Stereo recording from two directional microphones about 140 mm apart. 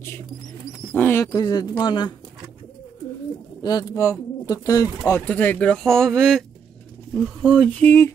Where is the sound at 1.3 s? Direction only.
30° left (ahead or behind).